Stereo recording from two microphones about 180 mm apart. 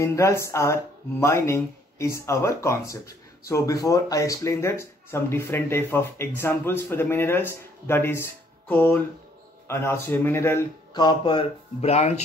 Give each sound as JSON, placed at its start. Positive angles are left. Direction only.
{"t": 0.0, "sound": "speech", "side_deg": 15}